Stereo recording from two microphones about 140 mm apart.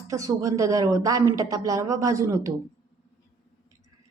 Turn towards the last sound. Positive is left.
turn(degrees=-20)  # may be behind; listen again after turning